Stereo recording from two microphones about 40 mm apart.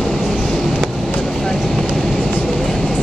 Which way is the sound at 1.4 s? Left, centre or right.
Centre.